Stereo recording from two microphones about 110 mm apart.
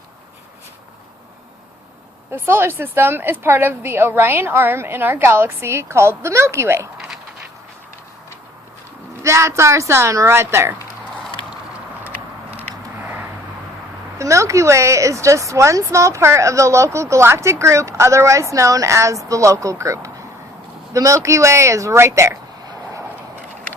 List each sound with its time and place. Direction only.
2.3 s a woman's voice: 20° right (ahead or behind)
9.2 s a woman's voice: 25° right (ahead or behind)
12.5 s a sound: 15° right (ahead or behind)
14.2 s a woman's voice: 30° right (ahead or behind)